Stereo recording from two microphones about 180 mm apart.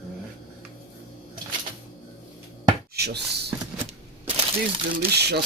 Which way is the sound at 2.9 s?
65° right (ahead or behind).